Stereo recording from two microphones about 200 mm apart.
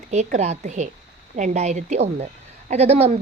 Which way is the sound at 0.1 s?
35° right (ahead or behind).